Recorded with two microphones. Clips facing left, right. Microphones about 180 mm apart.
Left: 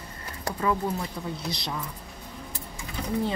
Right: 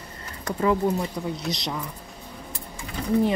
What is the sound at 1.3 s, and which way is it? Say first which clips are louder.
Speech: right 4 dB; 20° right (ahead or behind).